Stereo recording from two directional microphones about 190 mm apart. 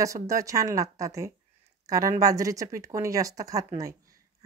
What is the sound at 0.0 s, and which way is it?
Speech, 15° right (ahead or behind).